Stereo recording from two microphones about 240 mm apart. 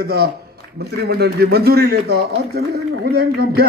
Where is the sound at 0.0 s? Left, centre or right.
Right.